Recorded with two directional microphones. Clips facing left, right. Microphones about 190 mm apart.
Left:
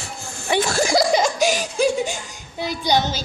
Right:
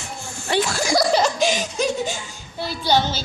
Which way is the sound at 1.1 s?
10° left (ahead or behind).